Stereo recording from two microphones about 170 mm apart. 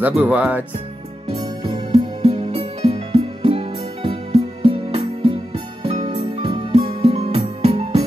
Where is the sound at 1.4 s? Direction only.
30° right (ahead or behind).